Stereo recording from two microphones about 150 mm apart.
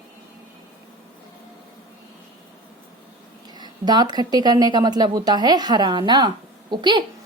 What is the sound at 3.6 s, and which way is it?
A woman's voice, 30° right (ahead or behind).